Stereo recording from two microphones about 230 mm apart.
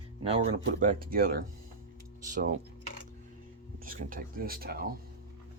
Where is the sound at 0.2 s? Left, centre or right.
Right.